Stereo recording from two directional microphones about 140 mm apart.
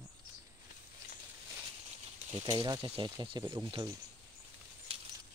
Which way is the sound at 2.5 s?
30° right (ahead or behind).